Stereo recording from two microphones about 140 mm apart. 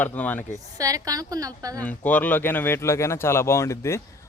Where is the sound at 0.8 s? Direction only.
25° right (ahead or behind).